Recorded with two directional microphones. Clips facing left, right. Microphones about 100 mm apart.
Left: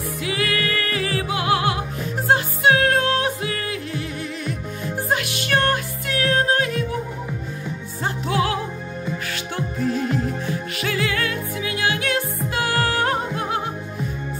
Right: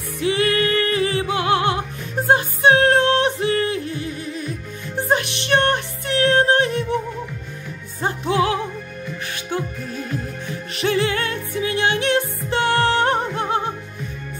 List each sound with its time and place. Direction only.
0.2 s music: 30° right (ahead or behind)
8.0 s music: 25° right (ahead or behind)
10.8 s music: 25° right (ahead or behind)